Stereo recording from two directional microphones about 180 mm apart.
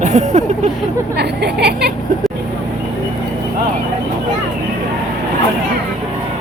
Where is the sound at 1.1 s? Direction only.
65° right (ahead or behind).